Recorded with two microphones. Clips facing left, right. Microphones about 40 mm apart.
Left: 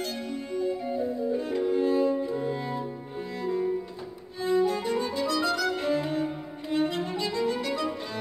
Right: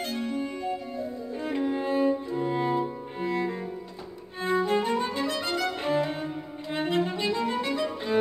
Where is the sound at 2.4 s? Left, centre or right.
Right.